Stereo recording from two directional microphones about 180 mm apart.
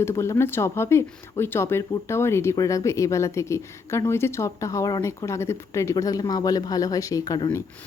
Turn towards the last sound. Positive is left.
turn(degrees=20)  # may be behind; listen again after turning